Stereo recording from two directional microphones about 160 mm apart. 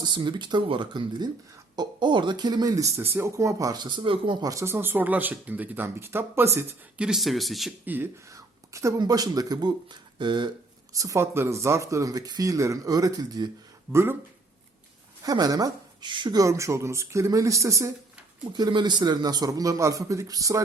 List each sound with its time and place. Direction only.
0.0 s speech: 30° right (ahead or behind)
7.1 s speech: centre (ahead or behind)
7.9 s speech: 15° right (ahead or behind)
13.9 s speech: 15° right (ahead or behind)
15.2 s speech: 25° right (ahead or behind)